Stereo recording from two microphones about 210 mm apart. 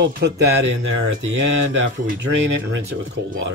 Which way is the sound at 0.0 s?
55° right (ahead or behind).